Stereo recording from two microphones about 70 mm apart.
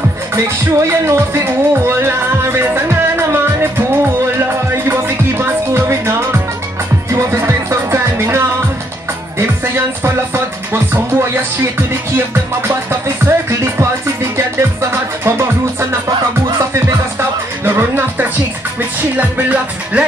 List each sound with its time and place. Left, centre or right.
1.0 s music: right
10.0 s music: right
13.2 s music: right
17.6 s music: right